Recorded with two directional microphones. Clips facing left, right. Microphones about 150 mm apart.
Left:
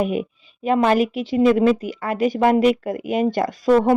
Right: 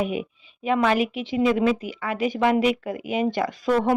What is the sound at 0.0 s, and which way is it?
Speech, 45° left (ahead or behind).